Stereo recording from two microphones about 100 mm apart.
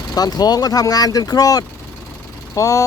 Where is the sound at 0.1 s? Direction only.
40° left (ahead or behind).